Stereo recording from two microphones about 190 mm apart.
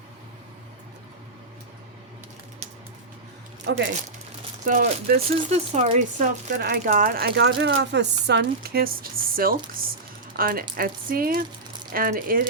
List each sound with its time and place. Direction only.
3.7 s speech: 65° right (ahead or behind)
4.6 s speech: 40° right (ahead or behind)
6.6 s speech: 60° right (ahead or behind)
6.9 s speech: 45° right (ahead or behind)